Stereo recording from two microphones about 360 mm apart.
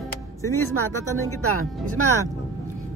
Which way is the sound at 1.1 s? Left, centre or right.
Right.